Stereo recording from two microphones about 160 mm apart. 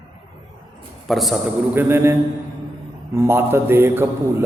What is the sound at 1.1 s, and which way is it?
Speech, centre (ahead or behind).